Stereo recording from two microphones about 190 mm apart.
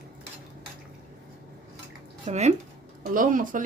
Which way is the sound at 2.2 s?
35° right (ahead or behind).